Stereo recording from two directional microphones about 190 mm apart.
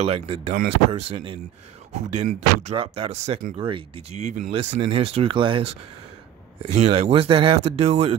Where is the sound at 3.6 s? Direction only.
30° right (ahead or behind).